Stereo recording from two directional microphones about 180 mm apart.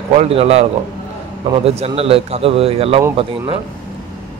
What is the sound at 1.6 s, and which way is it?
Speech, 35° right (ahead or behind).